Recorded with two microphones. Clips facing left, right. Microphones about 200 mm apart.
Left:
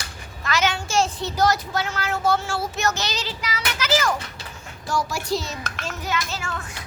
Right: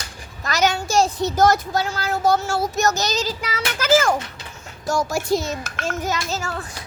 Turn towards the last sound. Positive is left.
turn(degrees=-35)  # may be behind; listen again after turning